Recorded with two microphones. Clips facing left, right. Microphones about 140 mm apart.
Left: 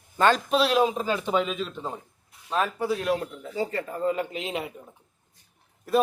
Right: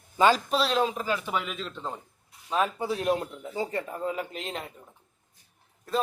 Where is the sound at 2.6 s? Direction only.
20° right (ahead or behind).